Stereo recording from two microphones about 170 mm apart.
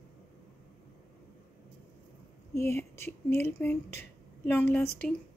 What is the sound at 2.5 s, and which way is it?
Speech, 15° left (ahead or behind).